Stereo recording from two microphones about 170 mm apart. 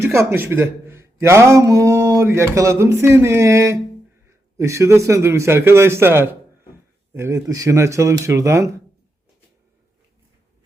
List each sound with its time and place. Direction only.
0.0 s a man's voice: 15° right (ahead or behind)